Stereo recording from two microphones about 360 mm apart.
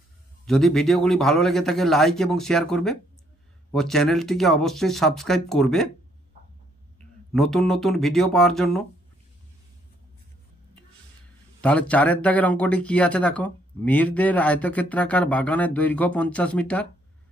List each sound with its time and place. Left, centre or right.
0.5 s speech: centre
7.0 s speech: centre
11.6 s speech: centre